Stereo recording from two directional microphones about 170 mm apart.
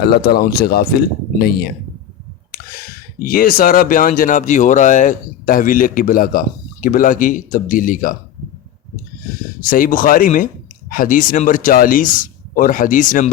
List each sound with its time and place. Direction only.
0.1 s speech: 65° left (ahead or behind)
3.2 s speech: 60° left (ahead or behind)
9.6 s speech: 55° left (ahead or behind)